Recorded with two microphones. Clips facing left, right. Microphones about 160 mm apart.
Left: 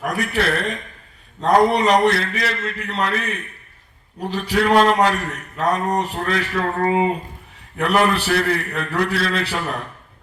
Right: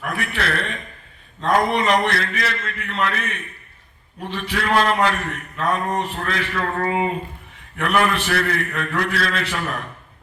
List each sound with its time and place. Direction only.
0.0 s a man's voice: 40° left (ahead or behind)
7.8 s a man's voice: 35° left (ahead or behind)